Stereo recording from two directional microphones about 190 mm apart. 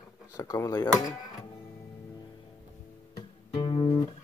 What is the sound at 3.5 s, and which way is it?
Guitar, 25° left (ahead or behind).